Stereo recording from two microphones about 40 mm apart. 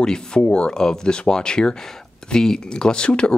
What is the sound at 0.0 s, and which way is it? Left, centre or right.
Speech, centre.